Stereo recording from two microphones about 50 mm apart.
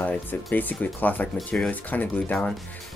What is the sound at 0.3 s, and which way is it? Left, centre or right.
Speech, left.